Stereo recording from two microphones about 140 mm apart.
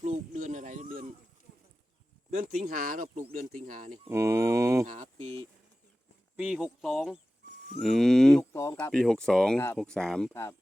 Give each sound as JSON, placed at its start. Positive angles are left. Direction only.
{"t": 0.0, "sound": "a sound", "side_deg": -60}
{"t": 2.3, "sound": "speech", "side_deg": -55}
{"t": 2.6, "sound": "speech", "side_deg": -90}
{"t": 3.3, "sound": "speech", "side_deg": -65}
{"t": 4.1, "sound": "speech", "side_deg": -20}
{"t": 5.1, "sound": "speech", "side_deg": -40}
{"t": 6.3, "sound": "speech", "side_deg": -5}
{"t": 8.5, "sound": "speech", "side_deg": 20}
{"t": 8.9, "sound": "speech", "side_deg": 5}